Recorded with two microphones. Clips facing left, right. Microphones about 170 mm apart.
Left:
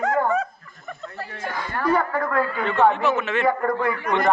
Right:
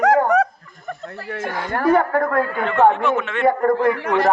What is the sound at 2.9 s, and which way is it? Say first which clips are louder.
Speech: right 1 dB; centre (ahead or behind).